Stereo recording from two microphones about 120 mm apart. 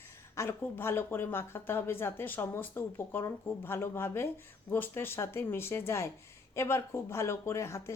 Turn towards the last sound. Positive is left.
turn(degrees=25)  # may be behind; listen again after turning